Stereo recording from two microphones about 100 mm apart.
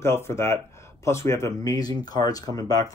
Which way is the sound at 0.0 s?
25° left (ahead or behind).